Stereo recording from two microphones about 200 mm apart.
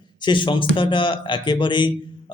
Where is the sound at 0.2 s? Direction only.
25° left (ahead or behind).